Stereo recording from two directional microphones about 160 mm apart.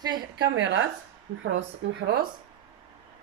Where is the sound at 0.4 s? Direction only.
90° right.